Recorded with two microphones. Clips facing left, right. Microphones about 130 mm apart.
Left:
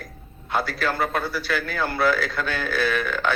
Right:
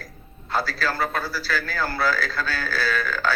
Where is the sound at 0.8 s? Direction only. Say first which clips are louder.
Left 1 dB; 20° left (ahead or behind).